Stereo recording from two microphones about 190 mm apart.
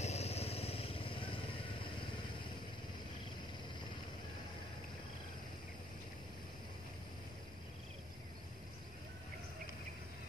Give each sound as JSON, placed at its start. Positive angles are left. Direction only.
{"t": 0.0, "sound": "vehicle", "side_deg": 35}